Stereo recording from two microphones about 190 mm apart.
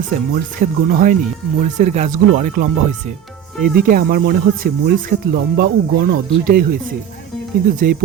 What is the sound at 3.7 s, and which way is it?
Speech, 50° right (ahead or behind).